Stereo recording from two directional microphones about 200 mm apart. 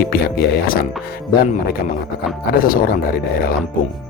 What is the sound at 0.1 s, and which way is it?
Speech, 50° left (ahead or behind).